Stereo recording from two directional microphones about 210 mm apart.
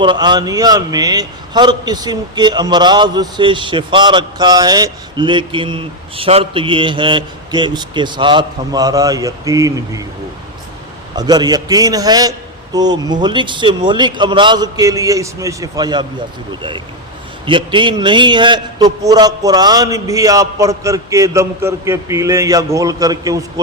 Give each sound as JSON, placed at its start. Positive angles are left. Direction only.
{"t": 0.0, "sound": "a man's voice", "side_deg": -20}
{"t": 11.2, "sound": "a man's voice", "side_deg": -20}
{"t": 17.4, "sound": "a man's voice", "side_deg": -25}